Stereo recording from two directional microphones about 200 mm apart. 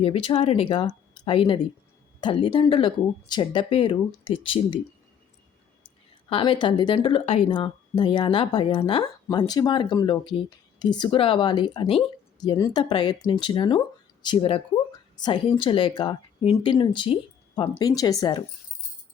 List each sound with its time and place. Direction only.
0.0 s speech: 30° left (ahead or behind)
6.2 s speech: 25° left (ahead or behind)